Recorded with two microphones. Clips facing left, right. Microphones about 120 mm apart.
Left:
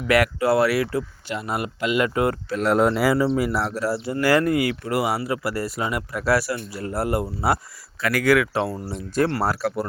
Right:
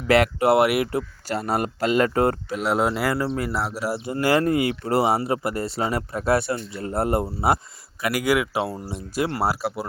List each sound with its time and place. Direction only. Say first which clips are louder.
0.1 s speech: right 2 dB; 25° right (ahead or behind)
1.3 s speech: right 4 dB; 40° right (ahead or behind)
2.6 s speech: left 5 dB; centre (ahead or behind); by 6.2 s 35° right (ahead or behind)
6.2 s speech: even; 25° right (ahead or behind)
8.0 s speech: left 3 dB; 15° right (ahead or behind)